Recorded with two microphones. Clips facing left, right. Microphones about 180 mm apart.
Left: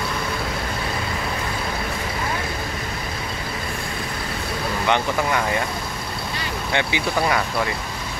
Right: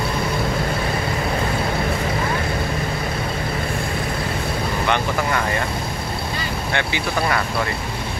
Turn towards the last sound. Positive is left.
turn(degrees=15)  # may be behind; listen again after turning